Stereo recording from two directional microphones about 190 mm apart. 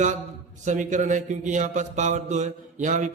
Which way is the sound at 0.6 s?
40° right (ahead or behind).